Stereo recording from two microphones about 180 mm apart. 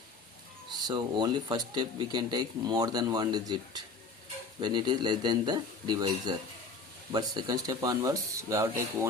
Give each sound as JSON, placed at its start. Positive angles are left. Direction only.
{"t": 0.7, "sound": "speech", "side_deg": -25}